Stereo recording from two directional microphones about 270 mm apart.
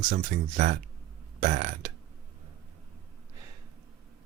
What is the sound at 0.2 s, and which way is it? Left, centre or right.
Speech, right.